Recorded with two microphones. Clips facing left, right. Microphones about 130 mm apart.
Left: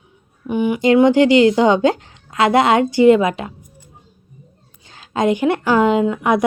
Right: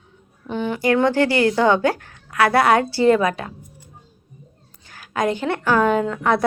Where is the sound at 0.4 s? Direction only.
15° left (ahead or behind).